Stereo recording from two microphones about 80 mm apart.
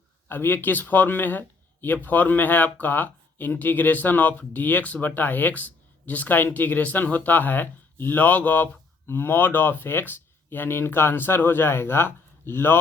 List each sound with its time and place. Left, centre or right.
0.3 s speech: left